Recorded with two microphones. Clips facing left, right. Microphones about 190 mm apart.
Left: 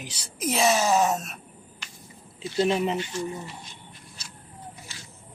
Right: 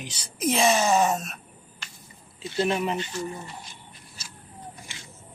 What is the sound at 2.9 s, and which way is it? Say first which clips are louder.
Speech: left 1 dB; 10° left (ahead or behind).